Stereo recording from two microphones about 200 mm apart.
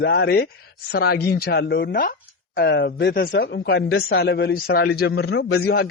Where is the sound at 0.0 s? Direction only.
55° left (ahead or behind).